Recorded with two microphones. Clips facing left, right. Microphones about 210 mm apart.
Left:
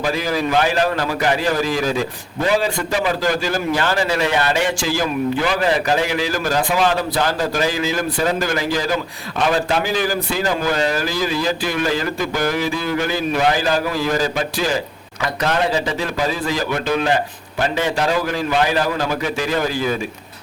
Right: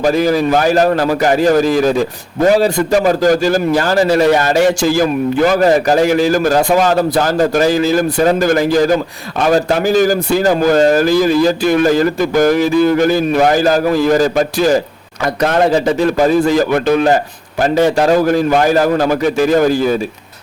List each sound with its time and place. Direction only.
0.0 s a man's voice: 45° right (ahead or behind)